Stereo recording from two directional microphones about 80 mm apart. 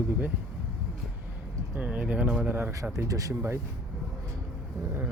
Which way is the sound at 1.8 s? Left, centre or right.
Centre.